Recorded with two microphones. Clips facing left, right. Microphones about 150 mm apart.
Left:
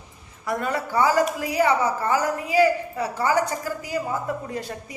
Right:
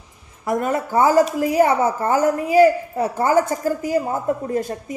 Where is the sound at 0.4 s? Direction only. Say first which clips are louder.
Right 5 dB; 45° right (ahead or behind).